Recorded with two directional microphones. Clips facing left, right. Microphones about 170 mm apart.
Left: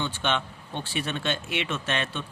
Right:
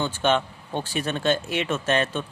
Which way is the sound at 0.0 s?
45° right (ahead or behind).